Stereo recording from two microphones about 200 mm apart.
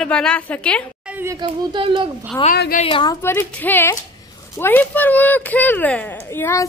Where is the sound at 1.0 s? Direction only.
10° right (ahead or behind).